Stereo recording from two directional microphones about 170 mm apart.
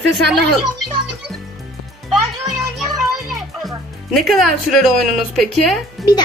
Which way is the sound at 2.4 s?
Centre (ahead or behind).